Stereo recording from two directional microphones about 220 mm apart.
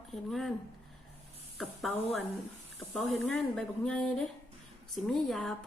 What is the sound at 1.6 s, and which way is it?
A woman's voice, centre (ahead or behind).